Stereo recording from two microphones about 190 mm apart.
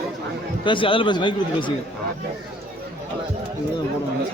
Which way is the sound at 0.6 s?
25° left (ahead or behind).